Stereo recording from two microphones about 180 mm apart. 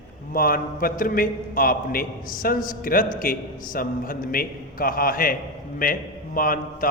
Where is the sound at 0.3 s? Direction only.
55° left (ahead or behind).